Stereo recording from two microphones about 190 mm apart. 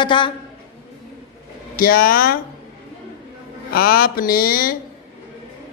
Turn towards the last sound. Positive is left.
turn(degrees=50)  # may be behind; listen again after turning